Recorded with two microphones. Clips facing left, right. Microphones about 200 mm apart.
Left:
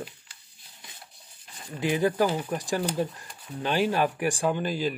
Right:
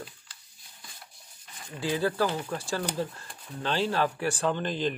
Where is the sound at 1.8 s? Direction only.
15° left (ahead or behind).